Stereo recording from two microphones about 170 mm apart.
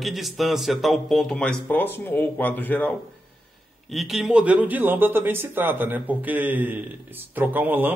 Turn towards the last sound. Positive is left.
turn(degrees=-10)  # may be behind; listen again after turning